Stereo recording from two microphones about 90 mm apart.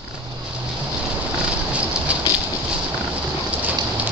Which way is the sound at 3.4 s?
15° right (ahead or behind).